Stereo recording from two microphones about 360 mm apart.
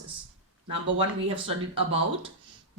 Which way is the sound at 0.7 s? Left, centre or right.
Centre.